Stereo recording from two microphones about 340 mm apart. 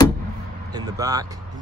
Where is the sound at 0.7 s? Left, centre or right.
Centre.